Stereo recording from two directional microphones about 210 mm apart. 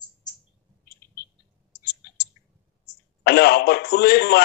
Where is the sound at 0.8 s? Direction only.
45° left (ahead or behind).